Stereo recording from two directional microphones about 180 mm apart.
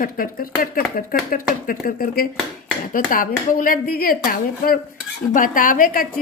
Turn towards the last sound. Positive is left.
turn(degrees=50)  # may be behind; listen again after turning